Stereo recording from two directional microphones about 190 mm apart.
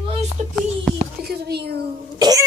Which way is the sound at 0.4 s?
40° right (ahead or behind).